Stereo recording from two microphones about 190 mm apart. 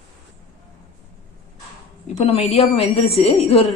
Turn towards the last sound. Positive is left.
turn(degrees=30)  # may be behind; listen again after turning